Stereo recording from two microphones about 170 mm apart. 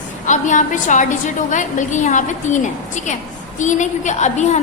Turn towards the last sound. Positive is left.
turn(degrees=45)  # may be behind; listen again after turning